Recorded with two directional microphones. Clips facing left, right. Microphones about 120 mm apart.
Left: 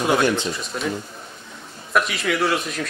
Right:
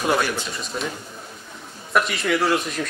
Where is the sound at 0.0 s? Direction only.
Centre (ahead or behind).